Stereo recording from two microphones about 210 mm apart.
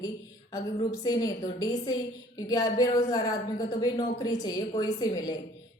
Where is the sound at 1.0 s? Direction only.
15° left (ahead or behind).